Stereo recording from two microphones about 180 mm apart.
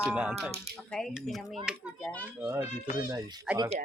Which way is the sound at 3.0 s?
15° right (ahead or behind).